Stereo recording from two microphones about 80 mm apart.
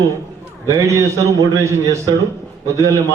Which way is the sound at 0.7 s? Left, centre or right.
Right.